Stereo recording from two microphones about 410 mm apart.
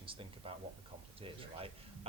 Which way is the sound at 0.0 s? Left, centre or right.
Centre.